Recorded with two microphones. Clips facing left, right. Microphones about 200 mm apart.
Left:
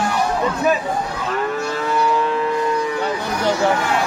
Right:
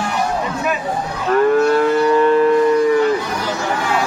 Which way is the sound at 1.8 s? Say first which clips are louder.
Right 6 dB; 55° right (ahead or behind).